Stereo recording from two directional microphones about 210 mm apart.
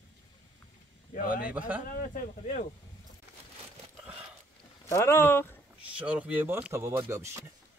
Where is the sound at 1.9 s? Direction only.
40° left (ahead or behind).